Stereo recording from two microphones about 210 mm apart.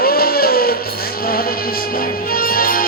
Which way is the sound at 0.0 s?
45° left (ahead or behind).